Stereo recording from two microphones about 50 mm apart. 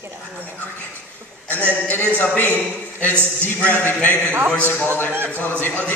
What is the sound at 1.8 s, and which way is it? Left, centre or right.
A man's voice, left.